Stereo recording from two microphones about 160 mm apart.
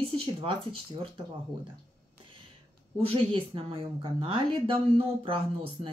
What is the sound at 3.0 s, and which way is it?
Speech, 35° right (ahead or behind).